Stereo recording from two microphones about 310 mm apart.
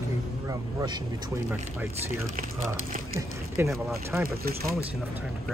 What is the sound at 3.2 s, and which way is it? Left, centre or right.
Speech, centre.